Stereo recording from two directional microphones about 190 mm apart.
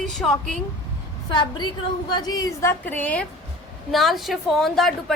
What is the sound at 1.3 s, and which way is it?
A woman's voice, 25° left (ahead or behind).